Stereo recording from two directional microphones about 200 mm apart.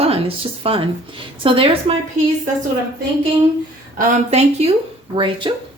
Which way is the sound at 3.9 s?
35° right (ahead or behind).